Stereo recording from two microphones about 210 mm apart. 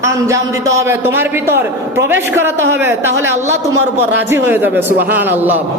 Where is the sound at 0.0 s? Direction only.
15° right (ahead or behind).